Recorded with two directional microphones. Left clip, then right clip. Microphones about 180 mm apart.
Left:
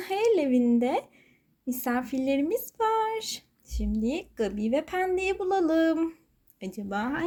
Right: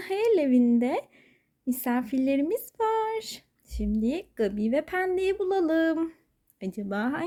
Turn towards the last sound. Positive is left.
turn(degrees=-45)  # may be behind; listen again after turning